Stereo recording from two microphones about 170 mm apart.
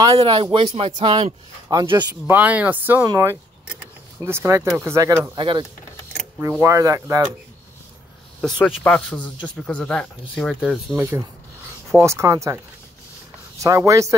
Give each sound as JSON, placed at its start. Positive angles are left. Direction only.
{"t": 0.2, "sound": "speech", "side_deg": -30}
{"t": 1.7, "sound": "speech", "side_deg": -25}
{"t": 2.2, "sound": "speech", "side_deg": -10}
{"t": 5.2, "sound": "speech", "side_deg": -25}
{"t": 8.4, "sound": "speech", "side_deg": 5}
{"t": 11.0, "sound": "speech", "side_deg": -15}
{"t": 13.6, "sound": "speech", "side_deg": -20}